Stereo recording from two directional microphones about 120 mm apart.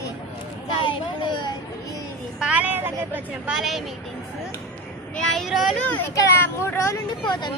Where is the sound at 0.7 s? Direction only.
45° left (ahead or behind).